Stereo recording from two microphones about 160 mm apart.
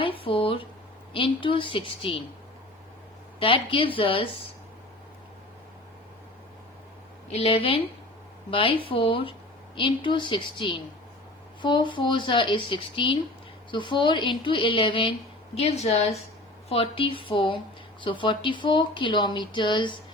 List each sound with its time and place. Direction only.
0.0 s a sound: 35° left (ahead or behind)
1.1 s speech: 30° left (ahead or behind)
3.4 s speech: 35° left (ahead or behind)
7.3 s a woman's voice: 40° left (ahead or behind)